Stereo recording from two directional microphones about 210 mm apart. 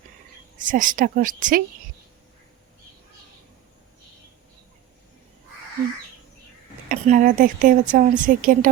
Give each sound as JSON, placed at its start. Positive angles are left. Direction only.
{"t": 0.6, "sound": "a woman's voice", "side_deg": -40}
{"t": 6.8, "sound": "a woman's voice", "side_deg": -40}